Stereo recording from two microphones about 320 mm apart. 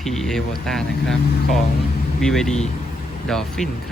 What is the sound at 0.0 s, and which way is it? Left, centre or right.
Speech, centre.